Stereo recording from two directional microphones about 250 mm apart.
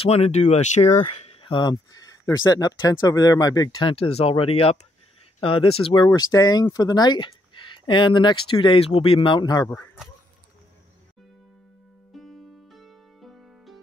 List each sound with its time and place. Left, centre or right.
0.0 s speech: left
12.1 s music: centre